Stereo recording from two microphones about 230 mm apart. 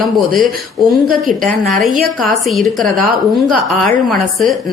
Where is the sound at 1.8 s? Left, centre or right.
Centre.